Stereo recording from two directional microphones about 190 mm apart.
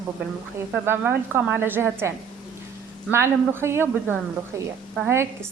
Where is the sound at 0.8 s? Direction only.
10° right (ahead or behind).